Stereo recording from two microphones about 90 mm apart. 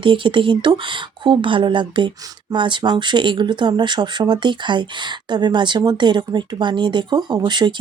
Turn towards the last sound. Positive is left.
turn(degrees=-55)  # may be behind; listen again after turning